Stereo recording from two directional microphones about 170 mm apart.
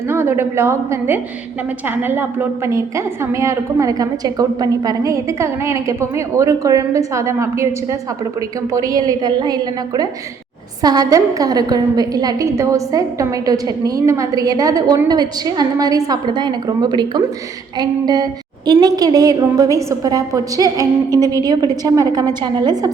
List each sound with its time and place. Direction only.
0.1 s a woman's voice: 15° right (ahead or behind)
9.0 s a woman's voice: 25° right (ahead or behind)